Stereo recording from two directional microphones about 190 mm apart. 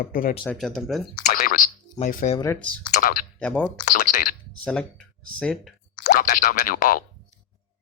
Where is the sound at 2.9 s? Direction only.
45° left (ahead or behind).